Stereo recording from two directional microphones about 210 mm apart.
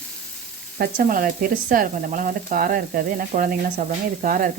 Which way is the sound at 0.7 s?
45° right (ahead or behind).